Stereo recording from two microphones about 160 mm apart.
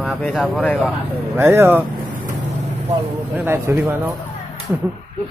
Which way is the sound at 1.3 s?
15° right (ahead or behind).